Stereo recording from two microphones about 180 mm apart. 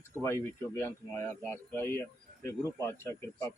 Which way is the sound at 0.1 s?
15° left (ahead or behind).